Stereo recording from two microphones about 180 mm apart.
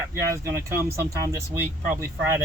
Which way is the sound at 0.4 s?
15° right (ahead or behind).